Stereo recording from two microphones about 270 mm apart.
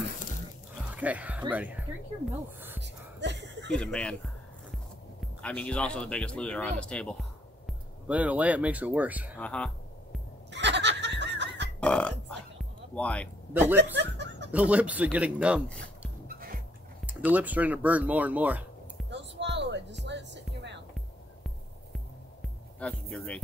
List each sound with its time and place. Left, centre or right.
0.9 s speech: centre
2.8 s music: right
3.6 s speech: centre
5.4 s speech: centre
10.5 s goat: right
11.8 s burping: centre
13.5 s speech: centre
13.9 s chuckle: right
14.5 s speech: centre
16.3 s music: right
17.0 s speech: centre
19.0 s music: right
21.9 s music: centre